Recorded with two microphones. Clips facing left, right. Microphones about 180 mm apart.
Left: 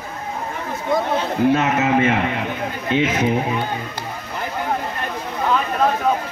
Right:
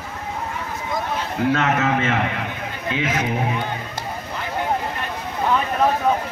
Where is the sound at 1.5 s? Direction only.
15° left (ahead or behind).